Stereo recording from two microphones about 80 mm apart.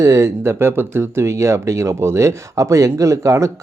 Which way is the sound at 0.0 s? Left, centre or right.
Right.